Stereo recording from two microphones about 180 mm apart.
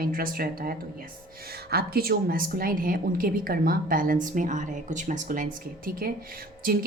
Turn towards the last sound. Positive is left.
turn(degrees=-55)  # may be behind; listen again after turning